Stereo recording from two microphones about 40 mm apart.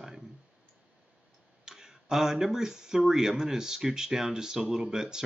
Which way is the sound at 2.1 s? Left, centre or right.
Centre.